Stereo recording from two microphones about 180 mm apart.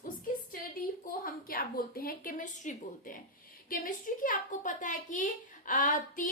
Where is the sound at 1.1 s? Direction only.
50° left (ahead or behind).